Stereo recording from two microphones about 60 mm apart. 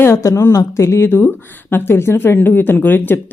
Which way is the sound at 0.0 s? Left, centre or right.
Left.